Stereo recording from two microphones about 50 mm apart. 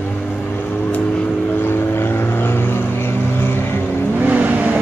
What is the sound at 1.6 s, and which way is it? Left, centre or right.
Vehicle, left.